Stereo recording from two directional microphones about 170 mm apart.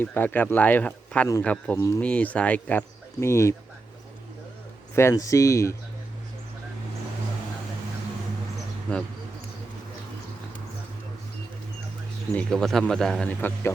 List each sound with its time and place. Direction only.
0.0 s speech: 10° left (ahead or behind)
4.9 s speech: 15° left (ahead or behind)
8.9 s a man's voice: 5° left (ahead or behind)
12.3 s a man's voice: 5° left (ahead or behind)